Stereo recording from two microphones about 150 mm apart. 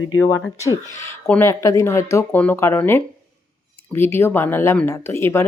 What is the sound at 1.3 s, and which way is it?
Speech, 15° left (ahead or behind).